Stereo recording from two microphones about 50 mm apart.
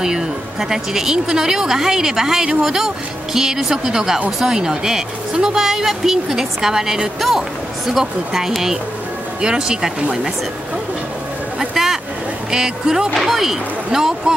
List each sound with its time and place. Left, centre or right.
0.0 s speech: centre
11.7 s a sound: centre
12.4 s speech: centre